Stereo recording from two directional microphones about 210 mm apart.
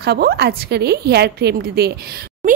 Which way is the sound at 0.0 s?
50° right (ahead or behind).